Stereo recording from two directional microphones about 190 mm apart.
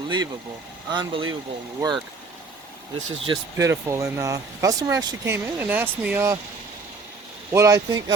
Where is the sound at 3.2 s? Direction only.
15° right (ahead or behind).